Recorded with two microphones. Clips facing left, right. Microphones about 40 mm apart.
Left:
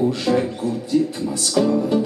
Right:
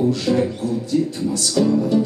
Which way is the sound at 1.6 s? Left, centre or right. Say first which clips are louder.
Even; left.